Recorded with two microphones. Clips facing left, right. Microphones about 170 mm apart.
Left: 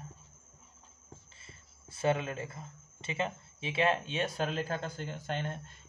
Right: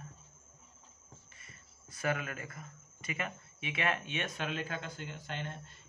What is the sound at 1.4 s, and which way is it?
Speech, 25° left (ahead or behind).